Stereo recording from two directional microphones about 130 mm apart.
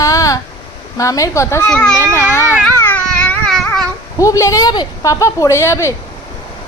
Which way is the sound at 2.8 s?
10° left (ahead or behind).